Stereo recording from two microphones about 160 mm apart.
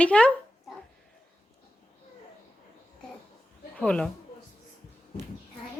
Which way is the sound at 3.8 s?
5° left (ahead or behind).